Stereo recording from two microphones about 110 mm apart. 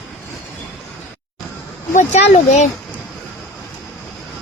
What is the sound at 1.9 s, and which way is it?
Speech, 90° left.